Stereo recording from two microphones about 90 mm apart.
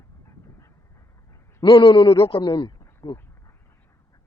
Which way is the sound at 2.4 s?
55° left (ahead or behind).